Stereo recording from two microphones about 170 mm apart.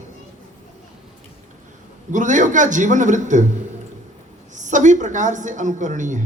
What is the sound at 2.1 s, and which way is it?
A man's voice, 45° right (ahead or behind).